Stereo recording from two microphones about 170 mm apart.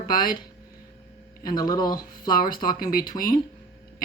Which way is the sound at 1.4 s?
25° left (ahead or behind).